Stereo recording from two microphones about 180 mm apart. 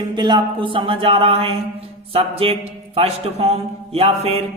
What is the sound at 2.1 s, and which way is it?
Speech, 30° right (ahead or behind).